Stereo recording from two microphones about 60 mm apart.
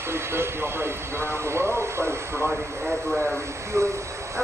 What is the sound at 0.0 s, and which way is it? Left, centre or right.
Vehicle, right.